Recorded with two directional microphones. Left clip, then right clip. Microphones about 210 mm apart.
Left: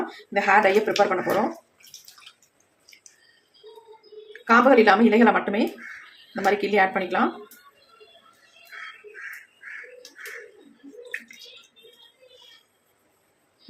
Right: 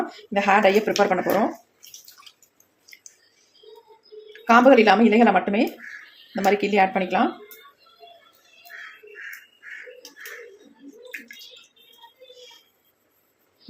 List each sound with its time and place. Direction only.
0.3 s speech: 25° right (ahead or behind)
4.3 s speech: 25° right (ahead or behind)